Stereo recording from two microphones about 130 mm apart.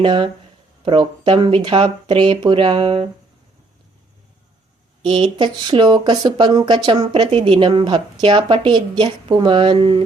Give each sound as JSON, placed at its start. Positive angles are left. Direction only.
{"t": 0.0, "sound": "speech", "side_deg": -40}
{"t": 5.0, "sound": "speech", "side_deg": -40}